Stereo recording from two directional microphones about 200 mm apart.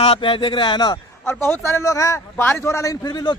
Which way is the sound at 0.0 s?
25° left (ahead or behind).